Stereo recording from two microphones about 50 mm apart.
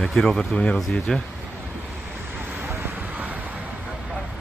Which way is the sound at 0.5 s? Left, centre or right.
Left.